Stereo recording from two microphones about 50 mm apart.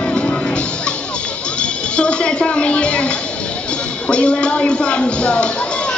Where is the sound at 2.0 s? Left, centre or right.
Left.